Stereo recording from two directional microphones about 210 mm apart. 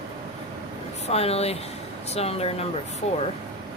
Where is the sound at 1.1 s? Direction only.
30° left (ahead or behind).